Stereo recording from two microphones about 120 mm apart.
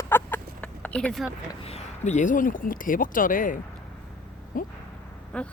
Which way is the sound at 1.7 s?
65° left (ahead or behind).